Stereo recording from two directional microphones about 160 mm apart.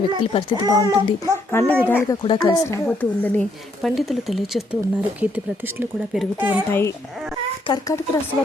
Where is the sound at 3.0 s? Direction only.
10° left (ahead or behind).